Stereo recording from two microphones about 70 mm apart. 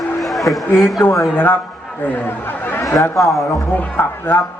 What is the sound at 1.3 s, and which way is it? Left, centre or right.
A man's voice, left.